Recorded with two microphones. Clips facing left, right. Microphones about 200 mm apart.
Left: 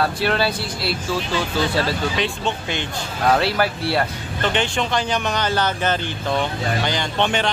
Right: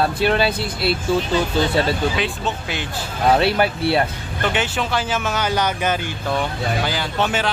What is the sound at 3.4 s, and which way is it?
Speech, 20° right (ahead or behind).